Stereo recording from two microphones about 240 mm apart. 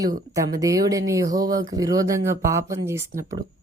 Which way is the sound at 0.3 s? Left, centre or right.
Centre.